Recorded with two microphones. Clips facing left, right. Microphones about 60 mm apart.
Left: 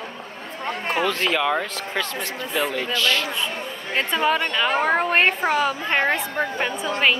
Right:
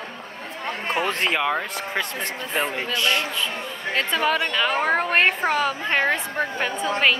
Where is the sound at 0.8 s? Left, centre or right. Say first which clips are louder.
Left 1 dB; right.